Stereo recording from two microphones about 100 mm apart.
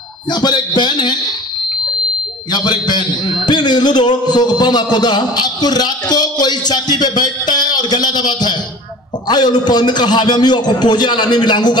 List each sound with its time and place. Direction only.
0.3 s a man's voice: 45° left (ahead or behind)
2.5 s a man's voice: 45° left (ahead or behind)